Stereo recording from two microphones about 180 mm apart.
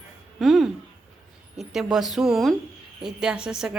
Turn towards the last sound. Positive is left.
turn(degrees=-5)  # may be behind; listen again after turning